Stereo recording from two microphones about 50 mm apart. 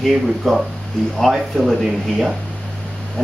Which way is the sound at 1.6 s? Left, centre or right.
Centre.